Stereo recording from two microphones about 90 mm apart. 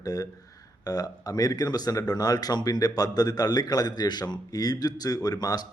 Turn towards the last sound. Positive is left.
turn(degrees=45)  # may be behind; listen again after turning